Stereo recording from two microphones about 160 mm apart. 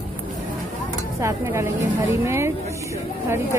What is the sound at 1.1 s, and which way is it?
Speech, 15° right (ahead or behind).